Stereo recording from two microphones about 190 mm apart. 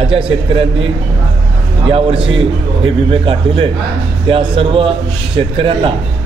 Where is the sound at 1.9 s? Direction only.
30° right (ahead or behind).